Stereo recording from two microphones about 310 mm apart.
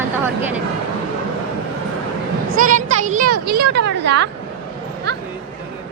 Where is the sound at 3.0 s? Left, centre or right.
Right.